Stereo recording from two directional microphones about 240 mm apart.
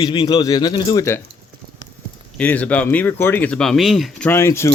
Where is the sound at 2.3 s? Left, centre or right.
Centre.